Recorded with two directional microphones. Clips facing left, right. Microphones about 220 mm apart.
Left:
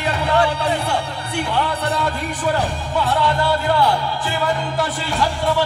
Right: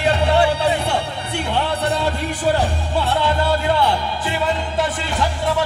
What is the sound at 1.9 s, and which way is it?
Speech, 25° right (ahead or behind).